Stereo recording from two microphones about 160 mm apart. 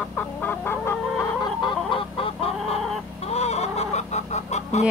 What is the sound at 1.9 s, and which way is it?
Chicken, 35° left (ahead or behind).